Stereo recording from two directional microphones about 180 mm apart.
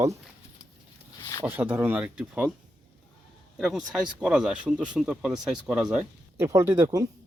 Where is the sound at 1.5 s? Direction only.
10° right (ahead or behind).